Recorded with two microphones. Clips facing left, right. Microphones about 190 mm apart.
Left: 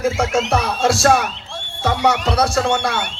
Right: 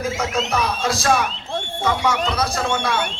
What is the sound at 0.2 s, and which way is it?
Speech, 70° left (ahead or behind).